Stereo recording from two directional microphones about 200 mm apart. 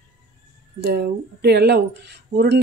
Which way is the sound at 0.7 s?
55° right (ahead or behind).